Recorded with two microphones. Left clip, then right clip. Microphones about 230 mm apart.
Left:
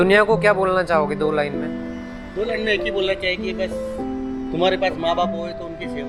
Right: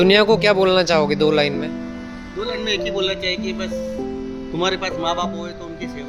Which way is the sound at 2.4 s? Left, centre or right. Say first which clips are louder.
Left 1 dB; right.